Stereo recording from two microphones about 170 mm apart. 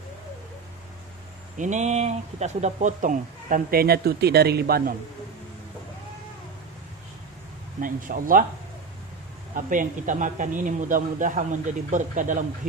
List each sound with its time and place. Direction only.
1.6 s speech: 45° right (ahead or behind); by 4.9 s 65° right (ahead or behind)
7.8 s speech: 55° right (ahead or behind)
9.6 s speech: 50° right (ahead or behind)